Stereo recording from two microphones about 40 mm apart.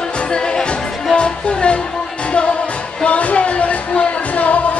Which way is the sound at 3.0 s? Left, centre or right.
Left.